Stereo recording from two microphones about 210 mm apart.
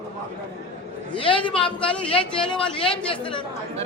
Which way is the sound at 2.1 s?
25° left (ahead or behind).